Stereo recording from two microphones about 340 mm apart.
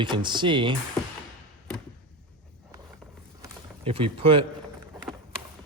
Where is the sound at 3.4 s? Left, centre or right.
Centre.